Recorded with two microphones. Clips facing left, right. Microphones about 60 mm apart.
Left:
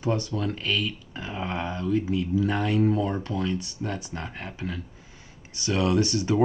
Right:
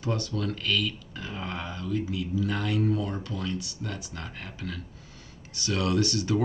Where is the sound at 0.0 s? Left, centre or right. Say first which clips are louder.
Left 3 dB; left.